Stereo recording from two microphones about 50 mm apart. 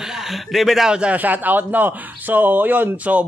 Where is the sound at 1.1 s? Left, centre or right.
Right.